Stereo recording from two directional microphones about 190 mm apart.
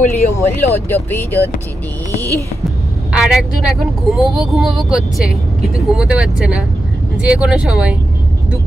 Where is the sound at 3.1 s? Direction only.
5° right (ahead or behind).